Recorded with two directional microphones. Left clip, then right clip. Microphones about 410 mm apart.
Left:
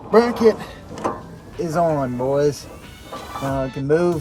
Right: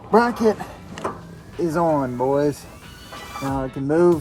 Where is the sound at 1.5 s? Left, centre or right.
Centre.